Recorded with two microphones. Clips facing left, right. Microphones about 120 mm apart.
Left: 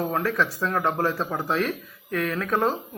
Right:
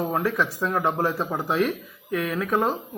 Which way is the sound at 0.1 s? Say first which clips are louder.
Even; 15° right (ahead or behind).